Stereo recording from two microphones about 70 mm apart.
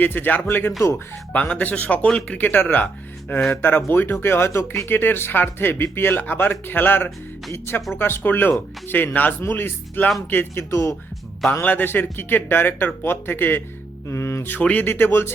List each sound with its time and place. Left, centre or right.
0.0 s speech: left
0.8 s speech: left
1.3 s speech: centre
2.4 s speech: left
11.6 s speech: left
14.1 s speech: left
14.6 s speech: left